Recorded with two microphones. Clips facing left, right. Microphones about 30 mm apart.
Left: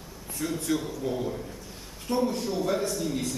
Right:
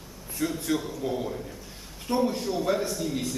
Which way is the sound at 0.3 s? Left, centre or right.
Centre.